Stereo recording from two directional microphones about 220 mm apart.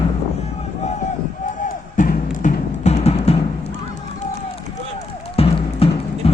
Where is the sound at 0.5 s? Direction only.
30° left (ahead or behind).